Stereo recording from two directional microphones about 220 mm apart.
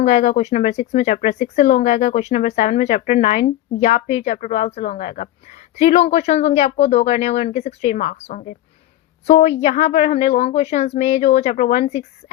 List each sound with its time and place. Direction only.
0.0 s a woman's voice: 30° left (ahead or behind)